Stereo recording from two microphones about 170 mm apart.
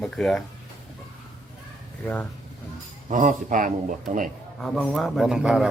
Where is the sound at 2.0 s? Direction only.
5° left (ahead or behind).